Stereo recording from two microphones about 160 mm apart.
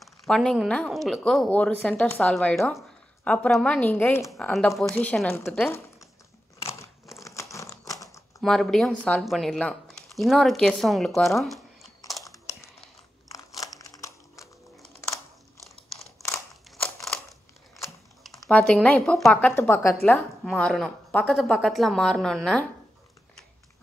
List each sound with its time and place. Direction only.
0.0 s speech: centre (ahead or behind)
4.6 s speech: centre (ahead or behind)
5.7 s a sound: 20° left (ahead or behind)
7.2 s crumpling: 20° left (ahead or behind)
8.4 s speech: 5° left (ahead or behind)
12.3 s a sound: 20° left (ahead or behind)
13.3 s crumpling: 20° left (ahead or behind)
16.7 s a sound: centre (ahead or behind)
18.2 s speech: 5° left (ahead or behind)